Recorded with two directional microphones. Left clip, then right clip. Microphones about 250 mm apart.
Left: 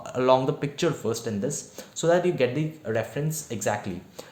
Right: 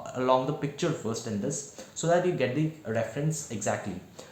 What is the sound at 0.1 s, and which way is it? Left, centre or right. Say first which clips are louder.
Speech: left 4 dB; left.